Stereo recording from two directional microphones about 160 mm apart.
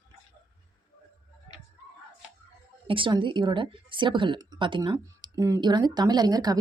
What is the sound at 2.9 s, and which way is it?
A woman's voice, 30° right (ahead or behind).